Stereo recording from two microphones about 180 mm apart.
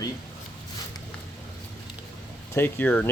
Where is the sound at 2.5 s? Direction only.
10° left (ahead or behind).